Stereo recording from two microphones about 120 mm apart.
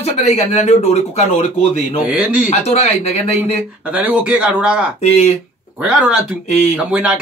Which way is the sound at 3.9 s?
10° right (ahead or behind).